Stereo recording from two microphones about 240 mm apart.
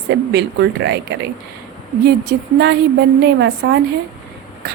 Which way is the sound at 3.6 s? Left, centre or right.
Right.